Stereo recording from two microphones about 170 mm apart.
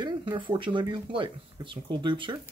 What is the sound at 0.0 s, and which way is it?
Speech, 25° right (ahead or behind).